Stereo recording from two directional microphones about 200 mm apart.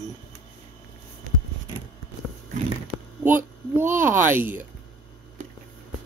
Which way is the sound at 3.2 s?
10° right (ahead or behind).